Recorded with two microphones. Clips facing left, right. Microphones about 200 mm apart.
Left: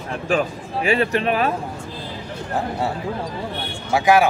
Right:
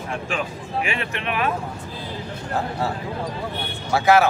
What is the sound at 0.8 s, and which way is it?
Speech, 35° left (ahead or behind).